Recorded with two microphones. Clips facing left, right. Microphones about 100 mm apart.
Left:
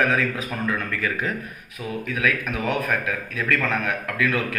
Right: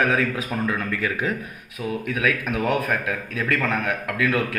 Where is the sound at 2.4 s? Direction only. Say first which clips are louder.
Right 2 dB; 10° right (ahead or behind).